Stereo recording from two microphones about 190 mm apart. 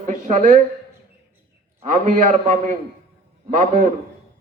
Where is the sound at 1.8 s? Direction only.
40° right (ahead or behind).